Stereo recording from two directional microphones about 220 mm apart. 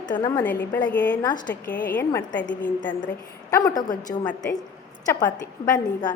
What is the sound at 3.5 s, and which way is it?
A woman's voice, 15° left (ahead or behind).